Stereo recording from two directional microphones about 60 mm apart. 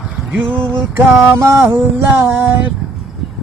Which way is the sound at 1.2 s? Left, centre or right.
Right.